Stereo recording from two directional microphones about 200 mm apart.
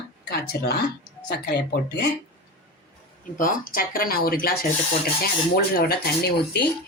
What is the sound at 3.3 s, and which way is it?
Speech, 45° left (ahead or behind).